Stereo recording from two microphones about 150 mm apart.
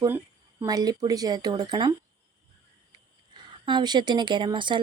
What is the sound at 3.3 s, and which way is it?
A woman's voice, 30° right (ahead or behind).